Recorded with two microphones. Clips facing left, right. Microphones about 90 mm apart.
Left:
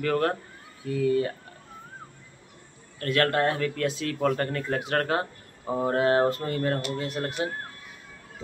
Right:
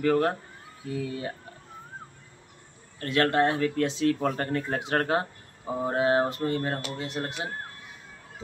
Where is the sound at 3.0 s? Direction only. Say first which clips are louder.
Even; 25° right (ahead or behind).